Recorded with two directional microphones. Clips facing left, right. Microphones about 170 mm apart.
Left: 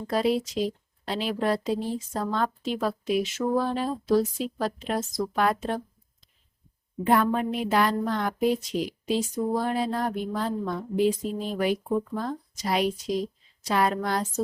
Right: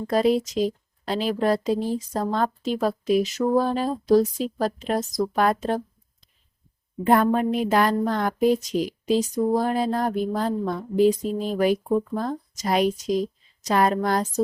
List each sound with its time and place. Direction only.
0.1 s speech: 45° right (ahead or behind)
7.0 s a woman's voice: 45° right (ahead or behind)